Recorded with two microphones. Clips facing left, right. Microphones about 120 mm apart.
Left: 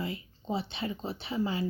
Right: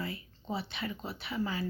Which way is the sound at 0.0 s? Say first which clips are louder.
Left 3 dB; 20° left (ahead or behind).